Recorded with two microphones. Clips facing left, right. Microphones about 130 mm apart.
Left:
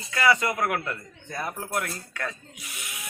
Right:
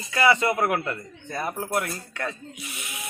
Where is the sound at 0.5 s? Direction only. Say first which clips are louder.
Right 3 dB; 30° right (ahead or behind).